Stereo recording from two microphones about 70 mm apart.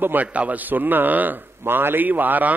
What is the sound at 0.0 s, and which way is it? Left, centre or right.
A man's voice, right.